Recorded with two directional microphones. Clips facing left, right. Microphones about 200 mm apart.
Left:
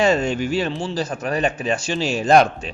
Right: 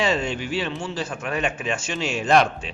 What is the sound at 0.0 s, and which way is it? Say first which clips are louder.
A man's voice: left 5 dB; 45° left (ahead or behind).